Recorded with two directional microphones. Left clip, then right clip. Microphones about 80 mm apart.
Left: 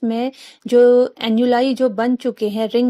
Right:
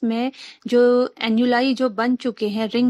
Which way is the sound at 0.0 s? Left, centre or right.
Left.